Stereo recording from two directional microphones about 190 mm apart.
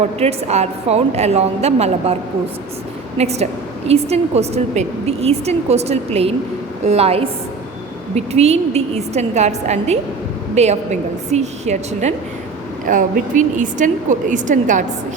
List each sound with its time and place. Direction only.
0.2 s a woman's voice: 35° right (ahead or behind)
3.2 s a woman's voice: 35° right (ahead or behind)